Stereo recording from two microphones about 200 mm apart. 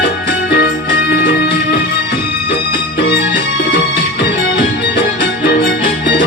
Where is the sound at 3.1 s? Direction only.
55° left (ahead or behind).